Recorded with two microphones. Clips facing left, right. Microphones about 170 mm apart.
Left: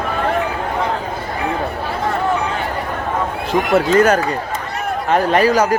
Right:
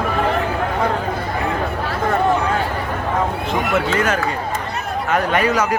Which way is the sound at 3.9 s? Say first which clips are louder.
Left 6 dB; 40° left (ahead or behind).